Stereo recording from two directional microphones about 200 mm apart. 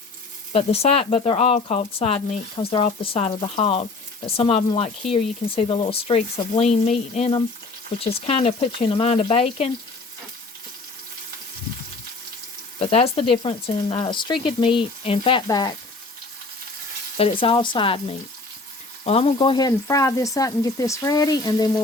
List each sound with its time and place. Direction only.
0.5 s speech: 30° left (ahead or behind)
12.8 s speech: 30° left (ahead or behind)
17.2 s speech: 30° left (ahead or behind)
19.0 s speech: 30° left (ahead or behind)